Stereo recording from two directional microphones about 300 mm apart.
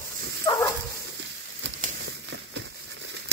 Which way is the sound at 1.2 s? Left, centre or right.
Right.